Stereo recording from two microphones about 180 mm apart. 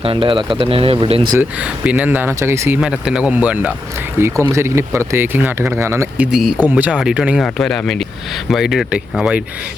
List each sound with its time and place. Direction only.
0.0 s speech: 30° right (ahead or behind)
1.3 s speech: 10° right (ahead or behind)
6.3 s speech: 5° right (ahead or behind)